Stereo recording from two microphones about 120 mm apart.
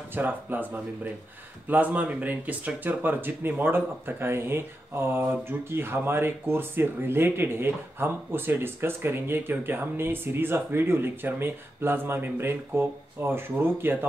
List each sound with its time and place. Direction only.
0.1 s speech: 15° right (ahead or behind)